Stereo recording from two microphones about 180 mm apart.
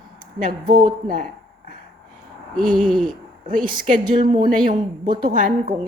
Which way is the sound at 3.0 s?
50° right (ahead or behind).